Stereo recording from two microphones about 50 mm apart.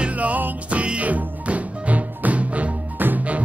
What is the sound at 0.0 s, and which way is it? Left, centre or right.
Music, right.